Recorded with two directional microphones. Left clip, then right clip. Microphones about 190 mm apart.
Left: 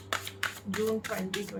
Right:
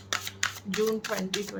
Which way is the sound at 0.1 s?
25° right (ahead or behind).